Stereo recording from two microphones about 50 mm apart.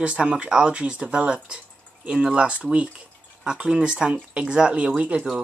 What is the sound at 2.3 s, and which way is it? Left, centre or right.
Speech, right.